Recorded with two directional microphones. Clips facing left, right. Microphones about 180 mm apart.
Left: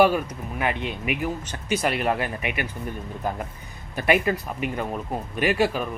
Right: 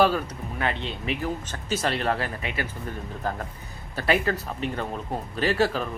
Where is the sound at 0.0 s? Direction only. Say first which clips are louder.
Left 3 dB; 15° left (ahead or behind).